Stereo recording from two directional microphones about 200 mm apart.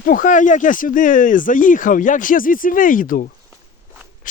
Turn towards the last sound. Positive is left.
turn(degrees=45)  # may be behind; listen again after turning